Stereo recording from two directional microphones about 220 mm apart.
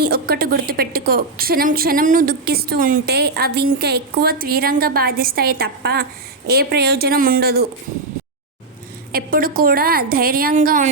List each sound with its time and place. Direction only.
0.0 s a woman's voice: 45° right (ahead or behind)
9.1 s a woman's voice: 40° right (ahead or behind)